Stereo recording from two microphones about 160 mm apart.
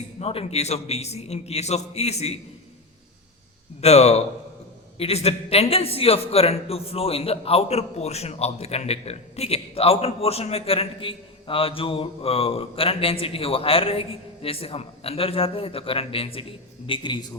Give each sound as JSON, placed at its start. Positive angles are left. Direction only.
{"t": 0.2, "sound": "a man's voice", "side_deg": 40}
{"t": 3.8, "sound": "a man's voice", "side_deg": 40}